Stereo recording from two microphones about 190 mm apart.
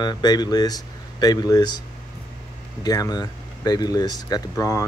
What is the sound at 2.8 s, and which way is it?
Speech, 20° left (ahead or behind).